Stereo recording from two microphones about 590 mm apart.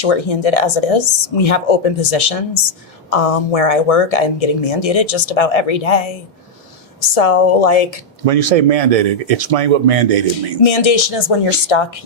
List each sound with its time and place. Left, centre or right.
0.0 s speech: left
8.2 s speech: right
10.6 s speech: left